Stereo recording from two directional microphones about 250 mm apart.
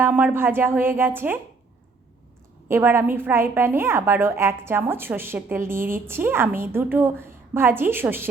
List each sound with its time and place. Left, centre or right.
0.0 s a woman's voice: centre
2.6 s a woman's voice: centre